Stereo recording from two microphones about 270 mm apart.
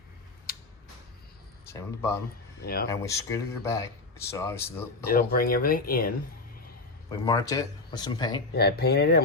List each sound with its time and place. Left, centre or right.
1.6 s speech: centre
2.6 s speech: left
2.9 s speech: centre
5.0 s speech: left
7.3 s speech: centre
8.5 s speech: left